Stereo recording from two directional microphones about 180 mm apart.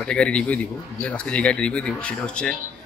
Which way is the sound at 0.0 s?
5° left (ahead or behind).